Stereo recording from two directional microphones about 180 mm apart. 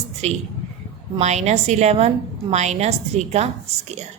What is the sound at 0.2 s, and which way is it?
A woman's voice, 40° right (ahead or behind).